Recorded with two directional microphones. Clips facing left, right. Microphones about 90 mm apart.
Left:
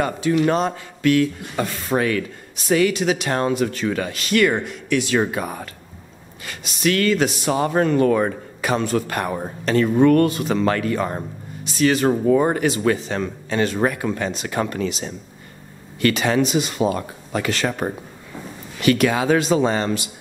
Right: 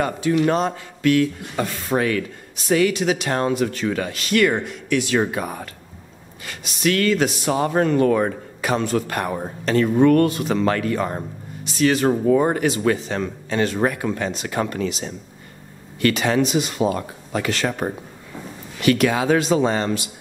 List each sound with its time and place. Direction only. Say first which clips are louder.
0.0 s speech: even; 15° left (ahead or behind)
16.8 s speech: even; 25° left (ahead or behind)